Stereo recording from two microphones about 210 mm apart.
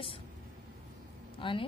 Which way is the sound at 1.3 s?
25° left (ahead or behind).